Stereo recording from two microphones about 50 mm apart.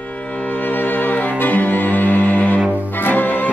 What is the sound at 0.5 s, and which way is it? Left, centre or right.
Music, left.